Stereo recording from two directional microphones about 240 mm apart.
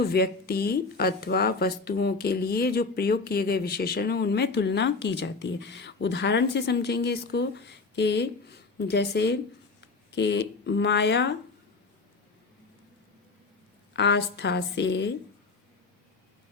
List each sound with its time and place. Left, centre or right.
0.0 s speech: left
13.9 s speech: left